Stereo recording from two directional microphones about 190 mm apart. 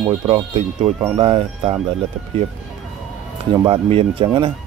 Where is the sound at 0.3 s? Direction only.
35° right (ahead or behind).